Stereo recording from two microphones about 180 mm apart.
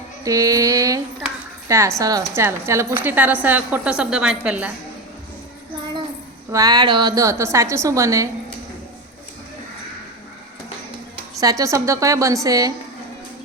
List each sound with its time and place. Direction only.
0.3 s mantra: 20° right (ahead or behind)
1.6 s a woman's voice: 15° right (ahead or behind)
6.5 s a woman's voice: 20° right (ahead or behind)
11.3 s a woman's voice: 20° right (ahead or behind)